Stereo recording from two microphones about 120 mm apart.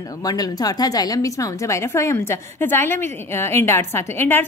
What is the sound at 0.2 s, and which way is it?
A woman's voice, 35° left (ahead or behind).